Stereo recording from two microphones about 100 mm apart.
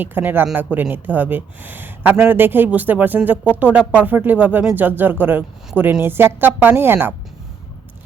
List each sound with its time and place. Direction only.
0.0 s speech: 20° right (ahead or behind)